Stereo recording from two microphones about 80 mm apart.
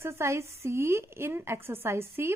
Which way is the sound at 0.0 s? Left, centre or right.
Right.